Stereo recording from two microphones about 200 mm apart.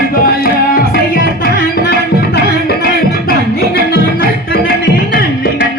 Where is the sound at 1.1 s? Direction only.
50° left (ahead or behind).